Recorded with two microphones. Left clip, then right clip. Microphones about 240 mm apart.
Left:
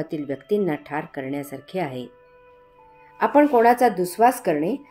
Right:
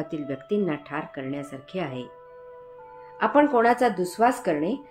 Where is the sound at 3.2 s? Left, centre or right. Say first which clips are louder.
Left 3 dB; left.